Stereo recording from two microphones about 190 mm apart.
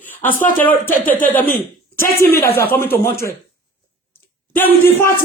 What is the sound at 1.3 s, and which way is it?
Speech, 10° left (ahead or behind).